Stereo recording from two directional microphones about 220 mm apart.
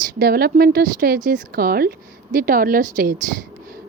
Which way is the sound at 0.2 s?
45° right (ahead or behind).